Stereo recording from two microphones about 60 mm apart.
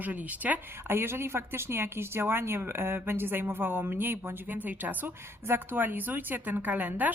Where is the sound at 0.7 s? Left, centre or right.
Right.